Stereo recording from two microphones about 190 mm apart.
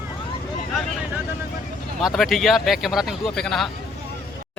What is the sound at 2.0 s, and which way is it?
Speech, centre (ahead or behind).